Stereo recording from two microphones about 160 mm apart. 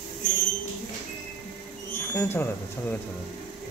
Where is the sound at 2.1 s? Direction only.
15° left (ahead or behind).